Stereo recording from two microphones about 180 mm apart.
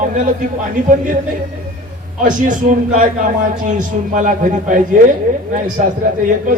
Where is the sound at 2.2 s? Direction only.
45° right (ahead or behind).